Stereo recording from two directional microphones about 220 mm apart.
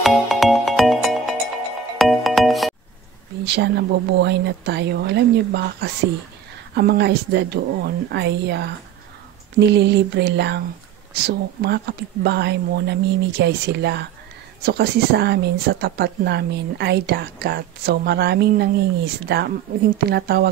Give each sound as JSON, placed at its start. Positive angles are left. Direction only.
{"t": 0.0, "sound": "music", "side_deg": 0}
{"t": 3.4, "sound": "speech", "side_deg": -50}